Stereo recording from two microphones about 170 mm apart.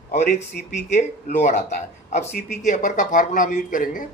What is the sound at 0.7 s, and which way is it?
Speech, 50° left (ahead or behind).